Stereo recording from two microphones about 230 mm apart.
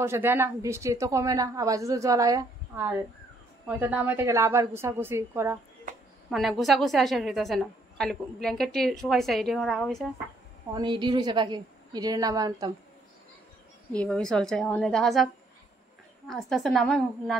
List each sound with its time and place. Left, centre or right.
0.0 s a woman's voice: centre
6.3 s a woman's voice: centre
10.7 s a woman's voice: centre
13.9 s a woman's voice: centre
16.3 s a woman's voice: centre